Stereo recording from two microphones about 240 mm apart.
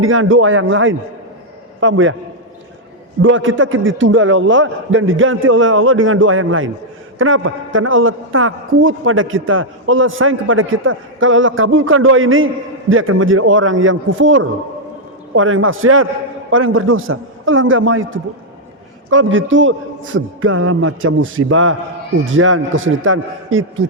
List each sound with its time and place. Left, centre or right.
0.0 s a man's voice: right
3.2 s a man's voice: right